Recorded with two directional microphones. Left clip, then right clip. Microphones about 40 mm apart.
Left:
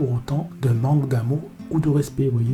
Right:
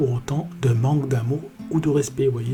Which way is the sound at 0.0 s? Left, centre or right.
Left.